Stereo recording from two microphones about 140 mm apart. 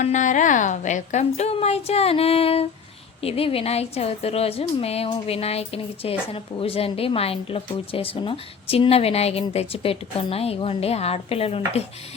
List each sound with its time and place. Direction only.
0.0 s speech: 60° left (ahead or behind); by 11.8 s 45° left (ahead or behind)